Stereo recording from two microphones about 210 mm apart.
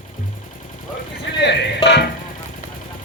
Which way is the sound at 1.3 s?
55° left (ahead or behind).